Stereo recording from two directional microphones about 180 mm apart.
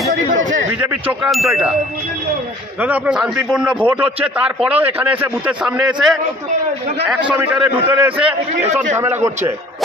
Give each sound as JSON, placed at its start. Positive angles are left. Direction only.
{"t": 0.1, "sound": "speech", "side_deg": -45}
{"t": 1.2, "sound": "chime", "side_deg": 0}
{"t": 2.8, "sound": "a man's voice", "side_deg": -5}
{"t": 7.1, "sound": "a man's voice", "side_deg": -5}